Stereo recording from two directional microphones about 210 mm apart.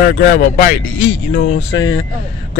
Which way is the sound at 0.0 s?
40° left (ahead or behind).